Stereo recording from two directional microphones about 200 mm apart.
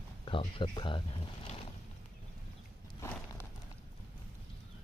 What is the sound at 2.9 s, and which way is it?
Horse, 10° left (ahead or behind).